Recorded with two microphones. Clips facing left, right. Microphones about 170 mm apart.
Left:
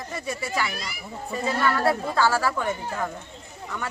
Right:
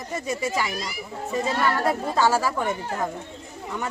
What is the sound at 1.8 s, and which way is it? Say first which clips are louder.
Speech: even; 20° right (ahead or behind).